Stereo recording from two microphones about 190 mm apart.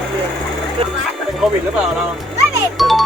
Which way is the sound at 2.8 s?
Centre (ahead or behind).